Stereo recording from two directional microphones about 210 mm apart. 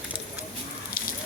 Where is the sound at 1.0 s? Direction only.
45° left (ahead or behind).